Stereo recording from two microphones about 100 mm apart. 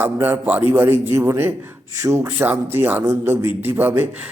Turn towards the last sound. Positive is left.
turn(degrees=-20)  # may be behind; listen again after turning